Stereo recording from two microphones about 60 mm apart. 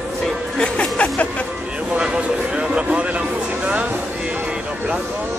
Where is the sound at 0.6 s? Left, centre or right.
Centre.